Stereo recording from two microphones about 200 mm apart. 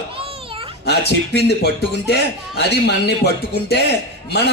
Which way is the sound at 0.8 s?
55° left (ahead or behind).